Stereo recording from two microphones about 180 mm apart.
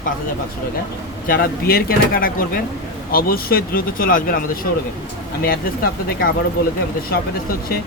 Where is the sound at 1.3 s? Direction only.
55° left (ahead or behind).